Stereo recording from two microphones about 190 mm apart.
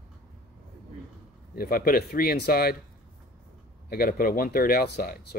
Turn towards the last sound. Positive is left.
turn(degrees=55)  # may be behind; listen again after turning